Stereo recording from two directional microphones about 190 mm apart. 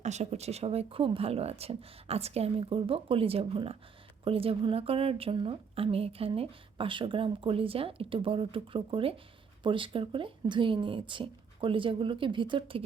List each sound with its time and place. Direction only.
0.0 s a woman's voice: 35° right (ahead or behind)